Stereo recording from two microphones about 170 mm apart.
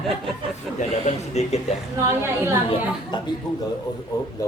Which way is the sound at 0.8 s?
40° left (ahead or behind).